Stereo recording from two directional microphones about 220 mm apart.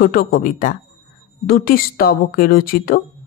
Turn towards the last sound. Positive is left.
turn(degrees=40)  # may be behind; listen again after turning